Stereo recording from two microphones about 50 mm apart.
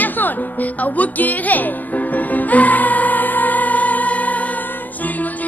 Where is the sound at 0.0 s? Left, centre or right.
Left.